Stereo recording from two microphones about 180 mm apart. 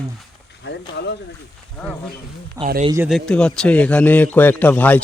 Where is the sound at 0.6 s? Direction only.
75° left (ahead or behind).